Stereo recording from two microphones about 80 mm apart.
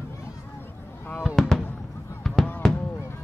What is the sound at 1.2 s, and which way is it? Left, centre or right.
Fireworks, centre.